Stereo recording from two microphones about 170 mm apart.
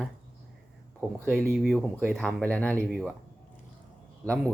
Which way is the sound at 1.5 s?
Centre (ahead or behind).